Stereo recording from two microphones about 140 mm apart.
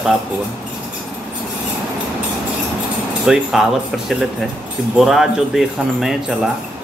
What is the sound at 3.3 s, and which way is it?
Speech, 5° right (ahead or behind).